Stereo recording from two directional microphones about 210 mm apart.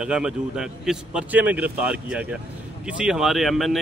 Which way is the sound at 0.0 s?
5° right (ahead or behind).